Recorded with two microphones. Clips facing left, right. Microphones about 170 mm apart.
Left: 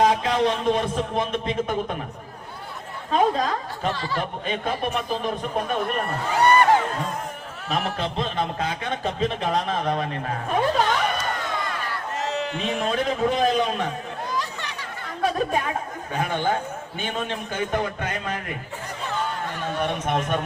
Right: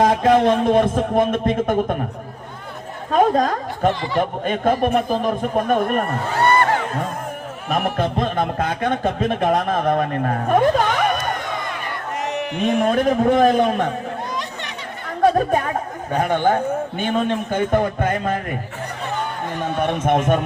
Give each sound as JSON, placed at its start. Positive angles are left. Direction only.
{"t": 0.0, "sound": "speech", "side_deg": -50}
{"t": 3.1, "sound": "speech", "side_deg": -50}
{"t": 6.3, "sound": "speech", "side_deg": 15}
{"t": 7.9, "sound": "speech", "side_deg": -50}
{"t": 12.2, "sound": "a sound", "side_deg": -20}
{"t": 12.6, "sound": "speech", "side_deg": -50}
{"t": 15.2, "sound": "speech", "side_deg": -50}